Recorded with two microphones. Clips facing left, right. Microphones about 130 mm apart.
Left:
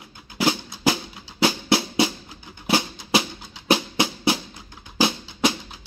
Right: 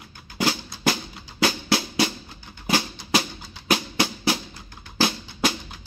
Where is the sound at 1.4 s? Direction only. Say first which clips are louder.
Left 2 dB; 25° left (ahead or behind).